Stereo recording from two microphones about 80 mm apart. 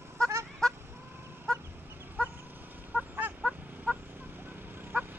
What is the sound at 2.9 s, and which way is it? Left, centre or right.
Fowl, centre.